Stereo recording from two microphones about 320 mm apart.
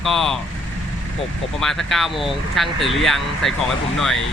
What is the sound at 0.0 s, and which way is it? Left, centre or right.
Speech, centre.